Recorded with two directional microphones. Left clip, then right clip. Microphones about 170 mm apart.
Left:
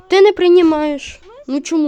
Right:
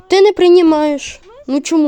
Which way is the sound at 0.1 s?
25° right (ahead or behind).